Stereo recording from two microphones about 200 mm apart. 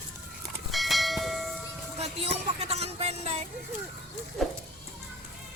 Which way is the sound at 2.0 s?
30° right (ahead or behind).